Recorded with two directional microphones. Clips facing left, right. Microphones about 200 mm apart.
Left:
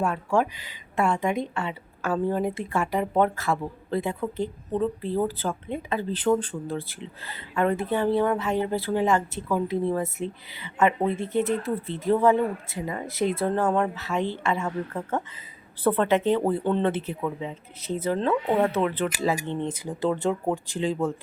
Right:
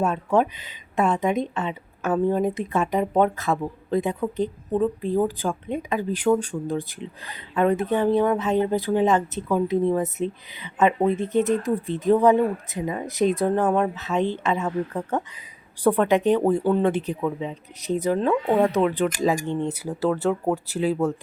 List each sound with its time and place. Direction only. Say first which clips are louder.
0.0 s a woman's voice: right 3 dB; 20° right (ahead or behind)